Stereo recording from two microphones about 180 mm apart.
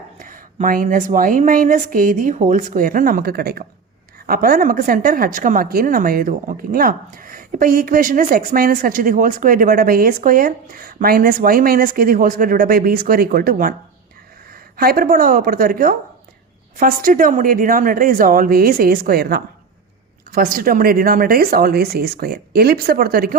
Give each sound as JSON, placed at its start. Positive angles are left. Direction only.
{"t": 0.2, "sound": "a woman's voice", "side_deg": -50}
{"t": 14.8, "sound": "a woman's voice", "side_deg": -55}